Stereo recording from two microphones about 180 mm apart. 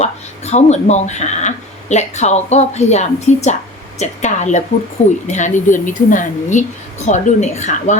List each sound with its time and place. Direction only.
0.0 s a woman's voice: 40° left (ahead or behind)